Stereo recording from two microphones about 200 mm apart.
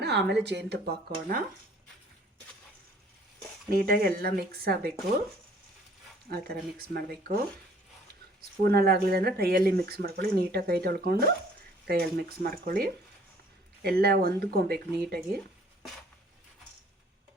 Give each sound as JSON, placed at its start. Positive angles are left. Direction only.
{"t": 0.0, "sound": "a sound", "side_deg": -55}
{"t": 0.4, "sound": "speech", "side_deg": -55}
{"t": 3.7, "sound": "speech", "side_deg": -50}
{"t": 6.3, "sound": "speech", "side_deg": -50}
{"t": 8.7, "sound": "speech", "side_deg": -50}